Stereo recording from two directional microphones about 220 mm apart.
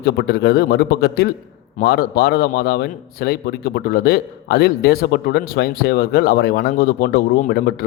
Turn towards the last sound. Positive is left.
turn(degrees=45)  # may be behind; listen again after turning